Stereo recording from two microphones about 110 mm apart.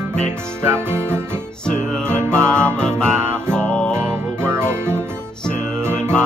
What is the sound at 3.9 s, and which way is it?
Music, 20° right (ahead or behind).